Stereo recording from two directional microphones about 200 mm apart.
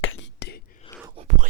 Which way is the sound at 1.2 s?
25° right (ahead or behind).